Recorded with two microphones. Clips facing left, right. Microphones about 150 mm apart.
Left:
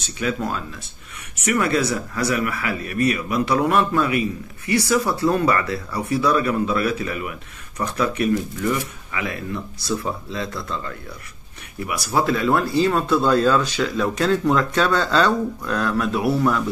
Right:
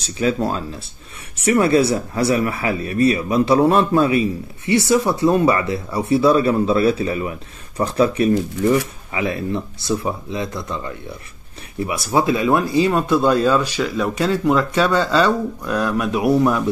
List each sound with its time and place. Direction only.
0.0 s speech: 35° right (ahead or behind)